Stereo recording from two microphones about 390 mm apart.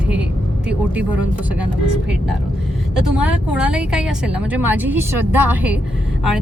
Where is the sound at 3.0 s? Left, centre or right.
Centre.